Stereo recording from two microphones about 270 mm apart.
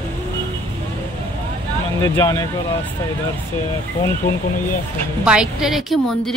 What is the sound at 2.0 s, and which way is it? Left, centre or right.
Speech, centre.